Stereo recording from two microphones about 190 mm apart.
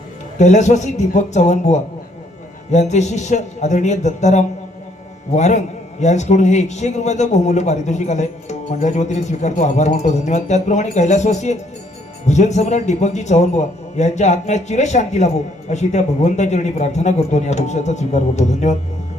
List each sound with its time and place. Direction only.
0.3 s a man's voice: 40° left (ahead or behind)